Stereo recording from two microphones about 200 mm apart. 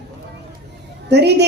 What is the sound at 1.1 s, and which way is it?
Speech, 55° right (ahead or behind).